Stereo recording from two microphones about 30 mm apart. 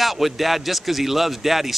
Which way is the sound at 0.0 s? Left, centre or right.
Centre.